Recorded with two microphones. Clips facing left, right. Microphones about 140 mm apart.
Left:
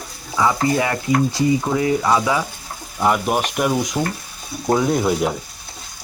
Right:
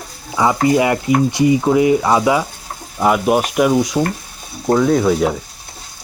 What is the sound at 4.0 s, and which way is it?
Speech, 15° right (ahead or behind).